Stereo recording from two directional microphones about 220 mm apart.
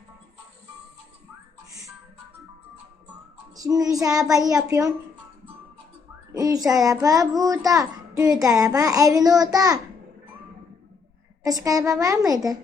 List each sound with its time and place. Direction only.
3.5 s a child's voice: 15° right (ahead or behind)
6.3 s a child's voice: 15° right (ahead or behind)
11.4 s a child's voice: 15° right (ahead or behind)